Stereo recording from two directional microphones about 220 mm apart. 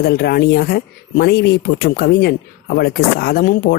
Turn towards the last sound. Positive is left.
turn(degrees=45)  # may be behind; listen again after turning